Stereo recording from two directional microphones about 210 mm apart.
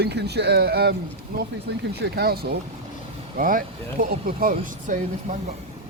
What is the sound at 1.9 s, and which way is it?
Speech, 50° right (ahead or behind).